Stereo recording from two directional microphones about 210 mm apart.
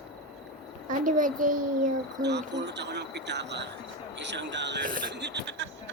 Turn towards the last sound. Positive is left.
turn(degrees=-55)  # may be behind; listen again after turning